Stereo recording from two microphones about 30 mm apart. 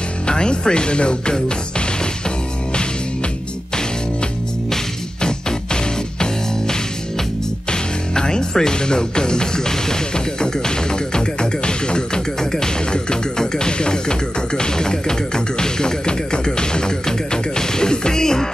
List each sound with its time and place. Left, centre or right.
0.3 s speech: left
5.2 s music: left
7.7 s speech: left
12.4 s music: left